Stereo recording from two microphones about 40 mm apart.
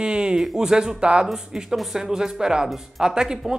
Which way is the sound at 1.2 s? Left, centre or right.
Centre.